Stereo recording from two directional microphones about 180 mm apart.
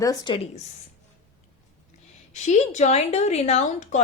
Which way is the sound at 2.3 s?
40° left (ahead or behind).